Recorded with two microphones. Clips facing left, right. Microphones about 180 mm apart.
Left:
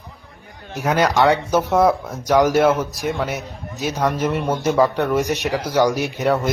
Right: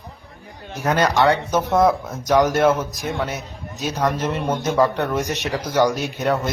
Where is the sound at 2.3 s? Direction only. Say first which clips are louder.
Left 1 dB; 15° left (ahead or behind).